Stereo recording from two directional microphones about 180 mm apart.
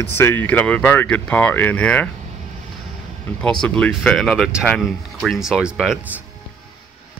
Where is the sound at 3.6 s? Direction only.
5° left (ahead or behind).